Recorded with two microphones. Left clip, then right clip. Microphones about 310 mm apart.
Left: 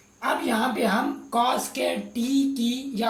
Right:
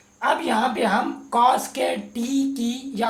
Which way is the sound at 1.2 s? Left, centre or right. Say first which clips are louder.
Right 7 dB; right.